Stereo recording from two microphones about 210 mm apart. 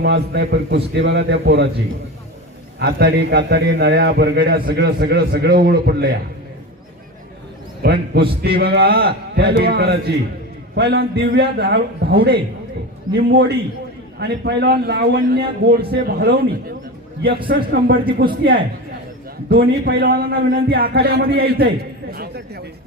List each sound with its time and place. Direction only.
0.0 s a man's voice: 50° right (ahead or behind)
2.7 s a man's voice: 50° right (ahead or behind)
7.8 s a man's voice: 50° right (ahead or behind)
13.1 s a man's voice: 50° right (ahead or behind)